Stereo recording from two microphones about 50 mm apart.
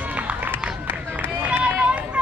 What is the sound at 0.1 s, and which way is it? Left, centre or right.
Run, right.